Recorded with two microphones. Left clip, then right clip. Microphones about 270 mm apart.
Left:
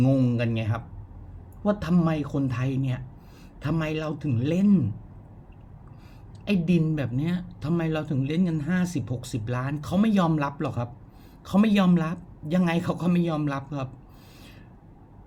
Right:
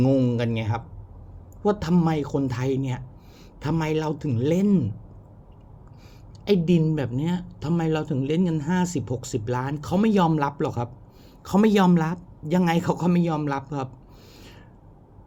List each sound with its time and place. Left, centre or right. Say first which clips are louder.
0.0 s a man's voice: right 2 dB; centre
6.4 s a woman's voice: right 5 dB; centre